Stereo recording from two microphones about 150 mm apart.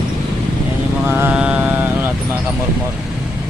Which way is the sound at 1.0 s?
10° right (ahead or behind).